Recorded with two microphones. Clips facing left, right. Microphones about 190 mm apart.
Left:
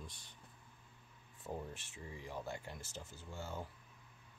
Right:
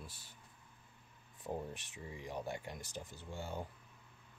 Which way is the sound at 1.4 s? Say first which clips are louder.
Right 3 dB; 15° right (ahead or behind).